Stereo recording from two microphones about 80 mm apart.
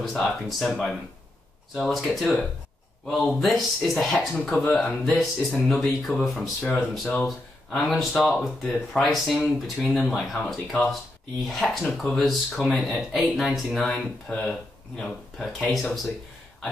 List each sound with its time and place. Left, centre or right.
0.0 s speech: centre
6.6 s speech: centre
7.2 s speech: centre